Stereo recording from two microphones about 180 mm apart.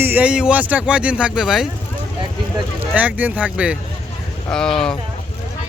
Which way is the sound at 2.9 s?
10° right (ahead or behind).